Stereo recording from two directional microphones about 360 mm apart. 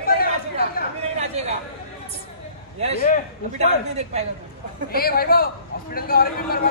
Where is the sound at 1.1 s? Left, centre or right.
Centre.